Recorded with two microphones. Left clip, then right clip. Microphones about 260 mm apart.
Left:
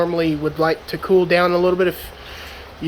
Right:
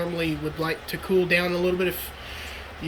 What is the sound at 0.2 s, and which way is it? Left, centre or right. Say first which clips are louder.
Speech: left 9 dB; centre.